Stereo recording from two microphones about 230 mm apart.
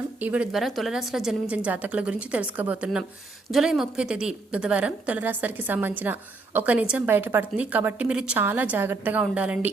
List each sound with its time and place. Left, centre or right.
0.2 s a woman's voice: centre